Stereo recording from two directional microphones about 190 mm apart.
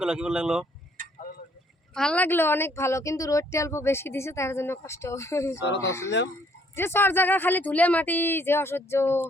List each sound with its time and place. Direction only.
0.0 s speech: 5° right (ahead or behind)
1.0 s a sound: 45° right (ahead or behind)
1.9 s a woman's voice: 5° left (ahead or behind)
5.5 s speech: 70° left (ahead or behind)
5.8 s a woman's voice: 15° left (ahead or behind)